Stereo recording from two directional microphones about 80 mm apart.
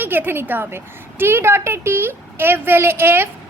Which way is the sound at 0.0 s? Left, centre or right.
Right.